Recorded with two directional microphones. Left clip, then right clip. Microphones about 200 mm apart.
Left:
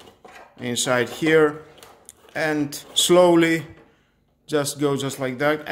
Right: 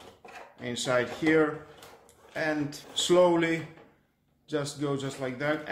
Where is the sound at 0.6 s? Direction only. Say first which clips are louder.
Left 6 dB; 55° left (ahead or behind).